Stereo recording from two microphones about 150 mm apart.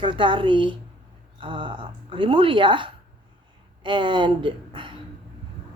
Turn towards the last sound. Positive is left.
turn(degrees=-35)  # may be behind; listen again after turning